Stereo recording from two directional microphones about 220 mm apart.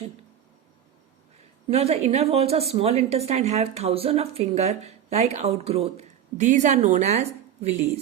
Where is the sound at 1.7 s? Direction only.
30° right (ahead or behind).